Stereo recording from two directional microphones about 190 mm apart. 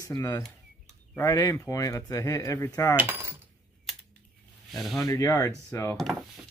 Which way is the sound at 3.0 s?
15° right (ahead or behind).